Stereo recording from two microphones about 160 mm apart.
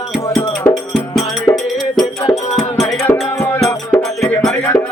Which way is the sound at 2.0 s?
20° left (ahead or behind).